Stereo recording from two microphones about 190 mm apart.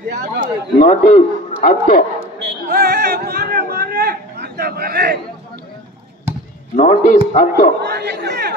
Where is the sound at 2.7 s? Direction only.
55° right (ahead or behind).